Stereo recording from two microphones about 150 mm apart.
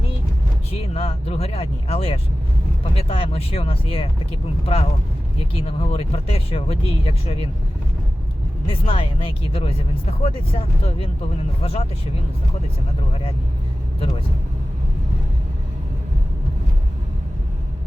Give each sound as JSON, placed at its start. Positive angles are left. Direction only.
{"t": 0.7, "sound": "speech", "side_deg": 40}
{"t": 8.6, "sound": "speech", "side_deg": 40}